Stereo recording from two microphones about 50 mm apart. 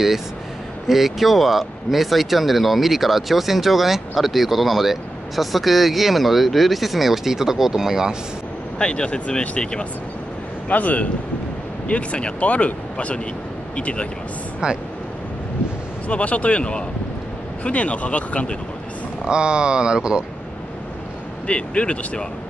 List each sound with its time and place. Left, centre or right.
0.8 s speech: centre
8.7 s speech: centre
10.7 s speech: left
16.1 s speech: left
19.2 s speech: centre
21.5 s speech: left